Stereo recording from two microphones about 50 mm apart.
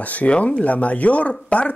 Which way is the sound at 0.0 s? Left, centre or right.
Left.